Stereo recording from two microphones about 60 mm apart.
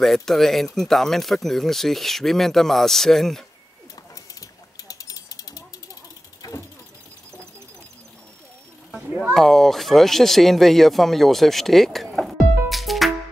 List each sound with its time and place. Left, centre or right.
0.0 s speech: centre
3.9 s ratchet: left
6.4 s vehicle: left
9.3 s speech: centre
12.3 s music: centre